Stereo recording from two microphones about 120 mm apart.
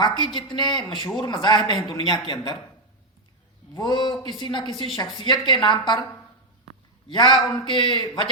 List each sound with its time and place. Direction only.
0.3 s speech: 40° left (ahead or behind)
3.8 s speech: 40° left (ahead or behind)
7.1 s a man's voice: 40° left (ahead or behind)